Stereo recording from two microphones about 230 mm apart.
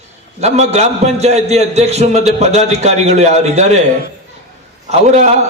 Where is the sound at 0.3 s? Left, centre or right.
Right.